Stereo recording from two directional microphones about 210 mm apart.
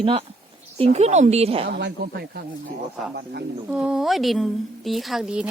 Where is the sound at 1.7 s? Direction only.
55° right (ahead or behind).